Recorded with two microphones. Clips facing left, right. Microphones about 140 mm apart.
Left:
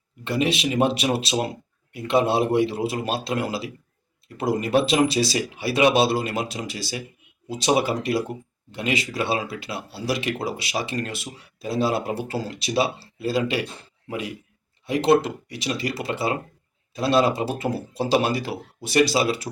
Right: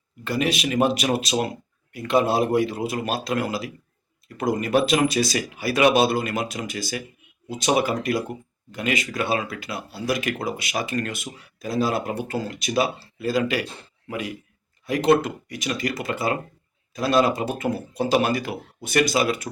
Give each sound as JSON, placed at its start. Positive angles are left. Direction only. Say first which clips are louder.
{"t": 0.3, "sound": "speech", "louder": "left 1 dB", "side_deg": 25}
{"t": 14.8, "sound": "speech", "louder": "even", "side_deg": 25}